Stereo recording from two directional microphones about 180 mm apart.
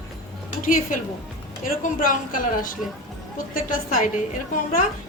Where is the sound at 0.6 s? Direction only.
50° left (ahead or behind).